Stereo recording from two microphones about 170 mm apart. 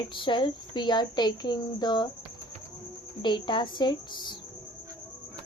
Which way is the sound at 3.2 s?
25° left (ahead or behind).